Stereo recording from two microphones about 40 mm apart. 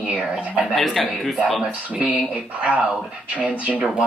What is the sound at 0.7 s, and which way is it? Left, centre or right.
Speech, centre.